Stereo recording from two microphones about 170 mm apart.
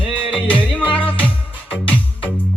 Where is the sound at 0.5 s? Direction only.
30° left (ahead or behind).